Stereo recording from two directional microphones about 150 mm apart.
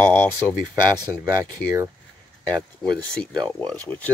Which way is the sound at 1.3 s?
20° right (ahead or behind).